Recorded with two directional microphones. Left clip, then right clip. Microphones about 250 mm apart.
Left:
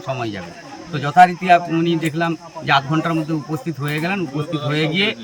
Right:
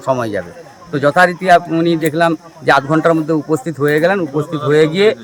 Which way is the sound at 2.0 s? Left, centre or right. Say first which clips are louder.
Right 8 dB; left.